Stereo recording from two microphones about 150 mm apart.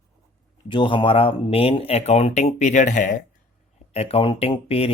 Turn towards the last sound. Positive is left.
turn(degrees=40)  # may be behind; listen again after turning